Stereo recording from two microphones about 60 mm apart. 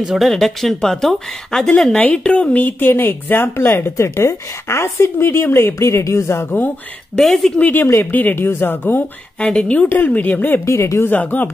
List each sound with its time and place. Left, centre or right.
0.0 s speech: centre
0.3 s a woman's voice: centre
2.0 s speech: centre; by 6.4 s left
7.2 s speech: centre
7.7 s speech: left
8.4 s speech: left
9.4 s speech: centre
9.8 s speech: left
10.6 s speech: left
11.1 s speech: left